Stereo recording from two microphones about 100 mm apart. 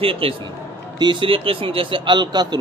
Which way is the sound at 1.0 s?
55° right (ahead or behind).